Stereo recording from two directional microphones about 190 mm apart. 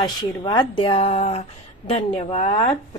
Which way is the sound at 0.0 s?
20° left (ahead or behind).